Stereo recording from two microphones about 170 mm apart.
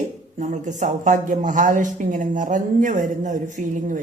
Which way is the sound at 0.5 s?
45° right (ahead or behind).